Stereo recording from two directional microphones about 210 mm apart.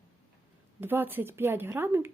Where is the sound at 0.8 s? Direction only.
10° right (ahead or behind).